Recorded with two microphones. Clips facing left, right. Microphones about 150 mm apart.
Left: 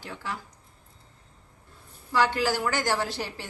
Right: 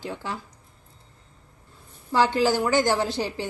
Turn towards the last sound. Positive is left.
turn(degrees=-20)  # may be behind; listen again after turning